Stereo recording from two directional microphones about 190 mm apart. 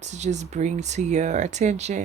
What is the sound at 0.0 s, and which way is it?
Speech, 35° right (ahead or behind).